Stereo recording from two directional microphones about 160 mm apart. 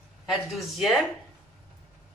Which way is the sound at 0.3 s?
Centre (ahead or behind).